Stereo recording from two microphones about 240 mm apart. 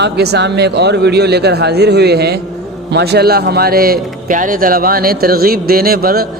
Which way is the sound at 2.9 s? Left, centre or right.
Right.